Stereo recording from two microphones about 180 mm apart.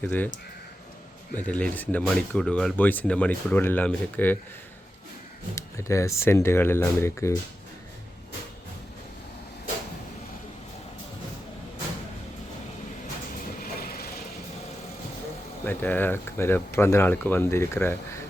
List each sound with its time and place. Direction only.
0.0 s speech: 10° left (ahead or behind)
1.4 s speech: 10° left (ahead or behind)
5.5 s speech: 15° left (ahead or behind)
13.6 s vehicle: 55° left (ahead or behind)
15.6 s speech: 10° left (ahead or behind)